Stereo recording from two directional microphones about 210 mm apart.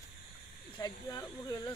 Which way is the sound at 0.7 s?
20° left (ahead or behind).